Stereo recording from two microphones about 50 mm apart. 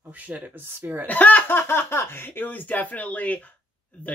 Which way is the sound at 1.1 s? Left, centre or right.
Left.